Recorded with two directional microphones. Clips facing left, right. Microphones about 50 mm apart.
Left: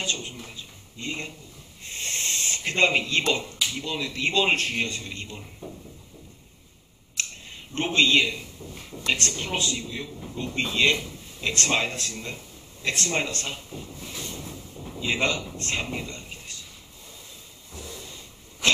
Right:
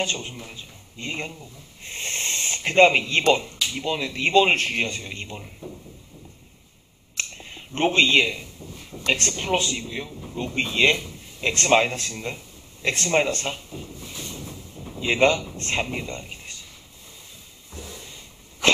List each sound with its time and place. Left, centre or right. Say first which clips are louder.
0.0 s a man's voice: right 3 dB; right
2.0 s rub: right 2 dB; right
3.8 s a man's voice: right 6 dB; right
7.7 s a man's voice: right 3 dB; right
15.0 s a man's voice: right 6 dB; right